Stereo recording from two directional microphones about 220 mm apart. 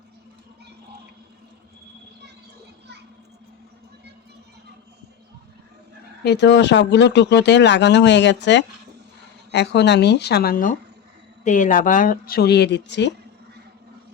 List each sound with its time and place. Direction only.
6.2 s speech: 50° left (ahead or behind)